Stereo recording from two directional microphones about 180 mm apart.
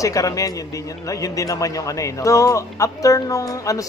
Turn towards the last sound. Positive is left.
turn(degrees=20)  # may be behind; listen again after turning